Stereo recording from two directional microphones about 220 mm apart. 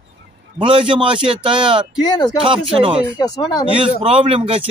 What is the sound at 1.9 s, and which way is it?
Speech, 20° left (ahead or behind).